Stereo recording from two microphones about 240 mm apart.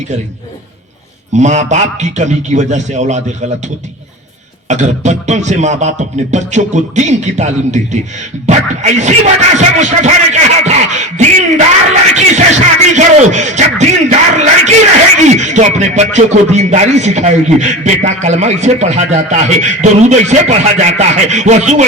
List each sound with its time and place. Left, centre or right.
1.3 s music: right
4.7 s music: right